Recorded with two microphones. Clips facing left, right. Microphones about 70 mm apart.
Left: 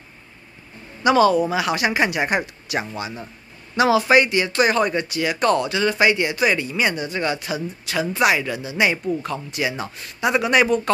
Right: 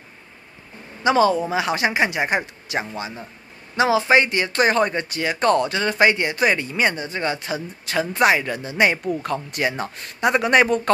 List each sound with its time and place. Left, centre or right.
1.0 s a man's voice: right